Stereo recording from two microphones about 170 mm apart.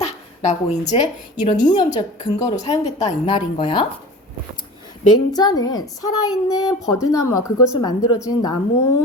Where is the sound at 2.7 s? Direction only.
40° left (ahead or behind).